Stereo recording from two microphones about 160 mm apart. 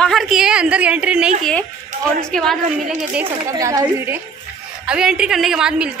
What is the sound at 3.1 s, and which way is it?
Speech, 15° right (ahead or behind).